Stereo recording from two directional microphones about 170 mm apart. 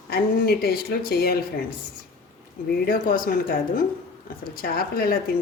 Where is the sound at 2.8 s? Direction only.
55° left (ahead or behind).